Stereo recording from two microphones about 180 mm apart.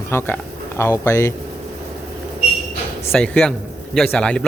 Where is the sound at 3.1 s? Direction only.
5° left (ahead or behind).